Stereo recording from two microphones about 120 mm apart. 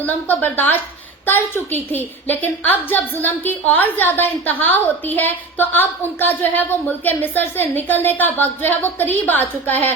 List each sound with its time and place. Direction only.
0.0 s a woman's voice: 15° left (ahead or behind)